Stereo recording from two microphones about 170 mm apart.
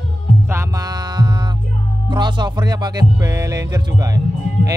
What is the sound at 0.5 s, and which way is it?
Music, 20° right (ahead or behind).